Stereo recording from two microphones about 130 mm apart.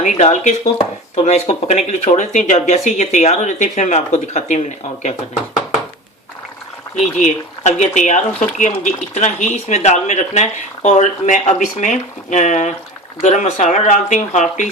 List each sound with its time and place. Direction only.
0.0 s speech: 70° left (ahead or behind)
0.8 s speech: 50° left (ahead or behind)
6.9 s speech: 65° left (ahead or behind)